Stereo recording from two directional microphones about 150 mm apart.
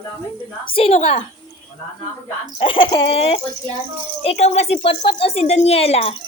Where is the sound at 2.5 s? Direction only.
35° left (ahead or behind).